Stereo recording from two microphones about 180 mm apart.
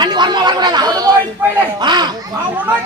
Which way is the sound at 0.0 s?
25° right (ahead or behind).